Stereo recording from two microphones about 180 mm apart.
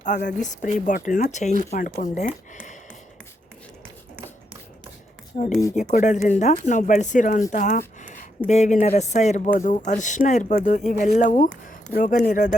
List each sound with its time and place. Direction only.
0.2 s speech: 50° left (ahead or behind)
5.3 s speech: 45° left (ahead or behind)
7.5 s a sound: 45° left (ahead or behind)
8.4 s speech: 40° left (ahead or behind)